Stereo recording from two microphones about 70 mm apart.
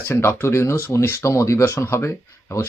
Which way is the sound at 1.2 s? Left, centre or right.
Left.